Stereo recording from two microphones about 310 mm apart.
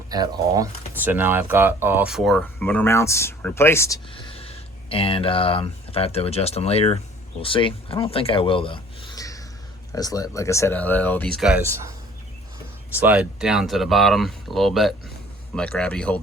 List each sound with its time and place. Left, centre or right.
0.1 s speech: centre
13.0 s speech: centre